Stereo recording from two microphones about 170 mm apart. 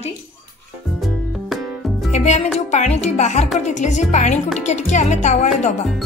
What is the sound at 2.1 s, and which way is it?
Music, 40° left (ahead or behind).